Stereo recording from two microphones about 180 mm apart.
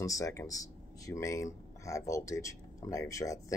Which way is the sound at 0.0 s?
20° left (ahead or behind).